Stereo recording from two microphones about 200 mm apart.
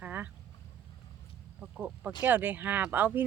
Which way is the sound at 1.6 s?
5° right (ahead or behind).